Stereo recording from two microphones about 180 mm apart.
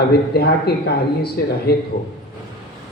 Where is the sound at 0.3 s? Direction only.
65° left (ahead or behind).